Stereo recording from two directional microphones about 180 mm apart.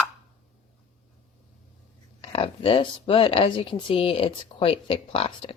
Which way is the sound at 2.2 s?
30° left (ahead or behind).